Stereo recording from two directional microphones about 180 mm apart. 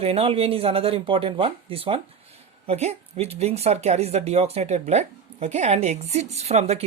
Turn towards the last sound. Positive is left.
turn(degrees=-35)  # may be behind; listen again after turning